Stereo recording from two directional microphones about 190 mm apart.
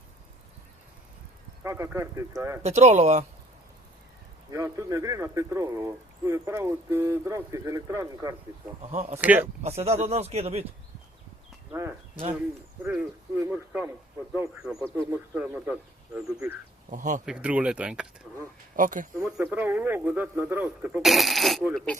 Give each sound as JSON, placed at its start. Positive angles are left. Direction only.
{"t": 1.6, "sound": "speech", "side_deg": -15}
{"t": 2.6, "sound": "speech", "side_deg": -35}
{"t": 4.5, "sound": "speech", "side_deg": -15}
{"t": 8.9, "sound": "speech", "side_deg": -35}
{"t": 9.1, "sound": "speech", "side_deg": -10}
{"t": 9.6, "sound": "speech", "side_deg": -35}
{"t": 11.7, "sound": "speech", "side_deg": -15}
{"t": 16.9, "sound": "speech", "side_deg": -40}
{"t": 17.2, "sound": "speech", "side_deg": -5}
{"t": 18.8, "sound": "speech", "side_deg": -45}
{"t": 19.2, "sound": "speech", "side_deg": -5}